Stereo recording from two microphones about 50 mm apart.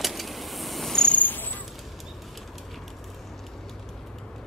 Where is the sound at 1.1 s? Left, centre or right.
Left.